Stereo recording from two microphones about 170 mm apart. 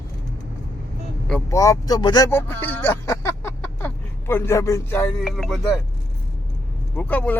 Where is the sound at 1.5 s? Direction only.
20° left (ahead or behind).